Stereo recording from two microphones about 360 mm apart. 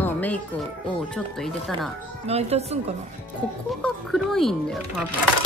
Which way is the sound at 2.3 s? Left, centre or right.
Centre.